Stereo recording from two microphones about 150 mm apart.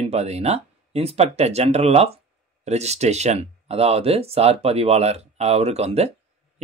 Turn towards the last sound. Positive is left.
turn(degrees=-45)  # may be behind; listen again after turning